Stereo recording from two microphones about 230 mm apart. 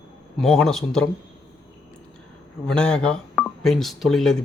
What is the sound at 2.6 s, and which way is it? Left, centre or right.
Speech, centre.